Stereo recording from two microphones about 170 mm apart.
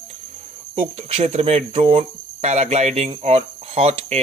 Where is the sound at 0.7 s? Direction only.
35° right (ahead or behind).